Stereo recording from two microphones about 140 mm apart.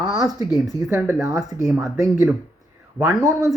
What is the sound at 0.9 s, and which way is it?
Speech, 15° right (ahead or behind).